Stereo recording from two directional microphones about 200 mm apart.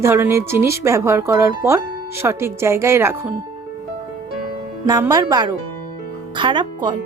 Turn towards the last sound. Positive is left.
turn(degrees=-25)  # may be behind; listen again after turning